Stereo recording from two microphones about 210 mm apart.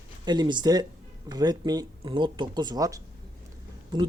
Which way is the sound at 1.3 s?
20° right (ahead or behind).